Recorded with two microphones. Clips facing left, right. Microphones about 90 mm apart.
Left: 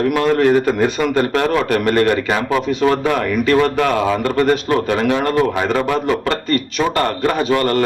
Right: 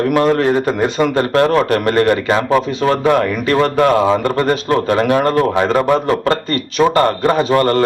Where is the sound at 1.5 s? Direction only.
35° right (ahead or behind).